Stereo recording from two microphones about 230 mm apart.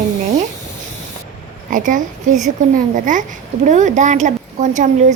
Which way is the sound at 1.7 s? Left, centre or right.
Right.